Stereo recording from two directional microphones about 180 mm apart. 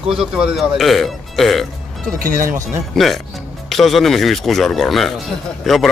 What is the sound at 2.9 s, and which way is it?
Speech, centre (ahead or behind).